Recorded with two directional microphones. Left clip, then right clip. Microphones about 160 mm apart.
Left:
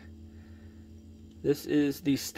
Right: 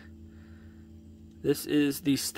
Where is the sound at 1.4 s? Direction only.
15° right (ahead or behind).